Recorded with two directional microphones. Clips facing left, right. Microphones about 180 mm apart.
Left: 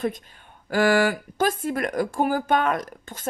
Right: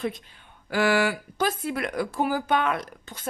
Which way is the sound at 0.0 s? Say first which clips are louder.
Left 3 dB; 45° left (ahead or behind).